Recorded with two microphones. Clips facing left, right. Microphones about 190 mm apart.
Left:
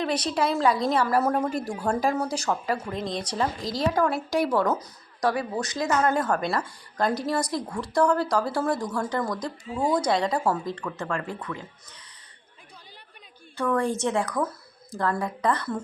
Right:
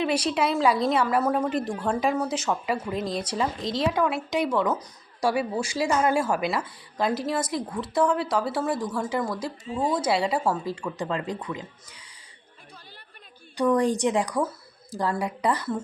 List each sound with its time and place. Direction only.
0.0 s a woman's voice: 10° right (ahead or behind)
4.8 s a woman's voice: 10° right (ahead or behind)
9.6 s speech: 25° right (ahead or behind)
9.9 s speech: 5° right (ahead or behind)
13.6 s speech: 15° right (ahead or behind)